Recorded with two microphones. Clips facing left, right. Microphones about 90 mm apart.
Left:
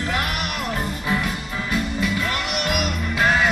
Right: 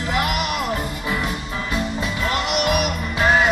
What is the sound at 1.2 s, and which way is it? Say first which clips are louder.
Music: right 1 dB; 25° right (ahead or behind).